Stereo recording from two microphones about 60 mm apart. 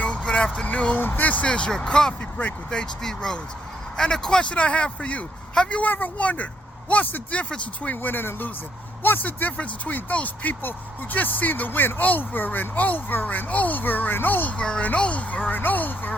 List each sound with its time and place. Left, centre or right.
0.0 s vehicle: centre
1.0 s speech: left
14.6 s speech: centre